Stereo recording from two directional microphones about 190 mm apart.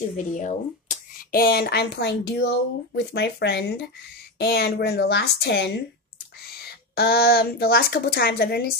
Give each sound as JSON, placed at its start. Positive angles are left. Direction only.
{"t": 0.3, "sound": "speech", "side_deg": 40}
{"t": 7.0, "sound": "speech", "side_deg": 55}